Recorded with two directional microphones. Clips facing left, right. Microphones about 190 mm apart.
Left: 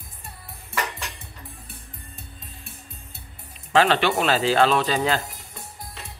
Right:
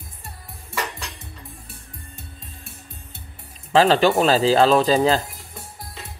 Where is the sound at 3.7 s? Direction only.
35° right (ahead or behind).